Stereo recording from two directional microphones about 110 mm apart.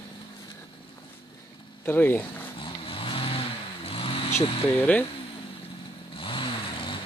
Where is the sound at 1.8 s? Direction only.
20° left (ahead or behind).